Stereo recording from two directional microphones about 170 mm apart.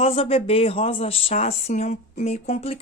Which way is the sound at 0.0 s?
35° left (ahead or behind).